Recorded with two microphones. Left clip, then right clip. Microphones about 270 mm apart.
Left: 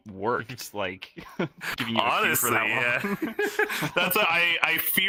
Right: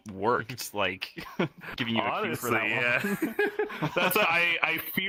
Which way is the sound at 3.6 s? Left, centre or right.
Left.